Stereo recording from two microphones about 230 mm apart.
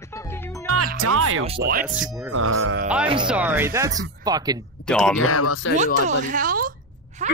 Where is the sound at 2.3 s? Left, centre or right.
Right.